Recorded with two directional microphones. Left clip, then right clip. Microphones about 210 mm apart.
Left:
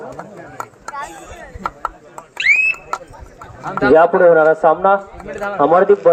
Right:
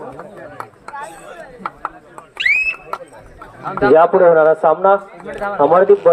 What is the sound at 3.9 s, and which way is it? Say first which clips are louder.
Speech: even; 30° right (ahead or behind).